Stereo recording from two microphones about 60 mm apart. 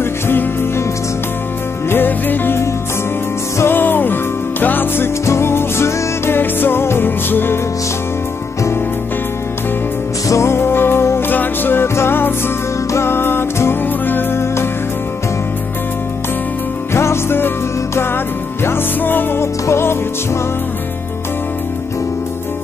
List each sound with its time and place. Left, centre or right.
0.0 s music: left
1.9 s music: left
5.2 s music: left
10.2 s music: left
11.2 s music: left
14.4 s music: left
16.9 s music: left
19.4 s music: left